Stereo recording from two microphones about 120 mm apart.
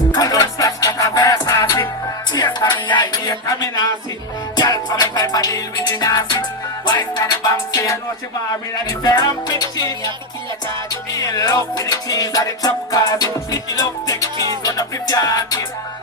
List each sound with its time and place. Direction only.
0.1 s music: 30° left (ahead or behind)
11.2 s music: 30° left (ahead or behind)